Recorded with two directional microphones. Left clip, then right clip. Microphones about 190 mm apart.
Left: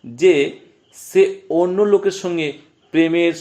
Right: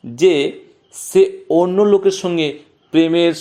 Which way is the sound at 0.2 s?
35° right (ahead or behind).